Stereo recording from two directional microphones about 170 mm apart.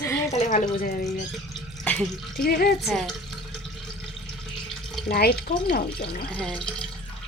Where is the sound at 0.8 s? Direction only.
55° left (ahead or behind).